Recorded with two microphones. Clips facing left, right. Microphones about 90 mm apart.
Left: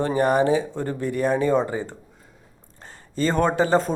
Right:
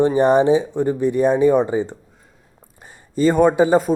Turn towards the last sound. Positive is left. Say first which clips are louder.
# right 5 dB
turn(degrees=-10)  # may be behind; listen again after turning